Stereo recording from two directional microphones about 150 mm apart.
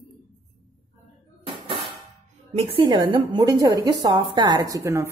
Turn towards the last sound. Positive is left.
turn(degrees=-20)  # may be behind; listen again after turning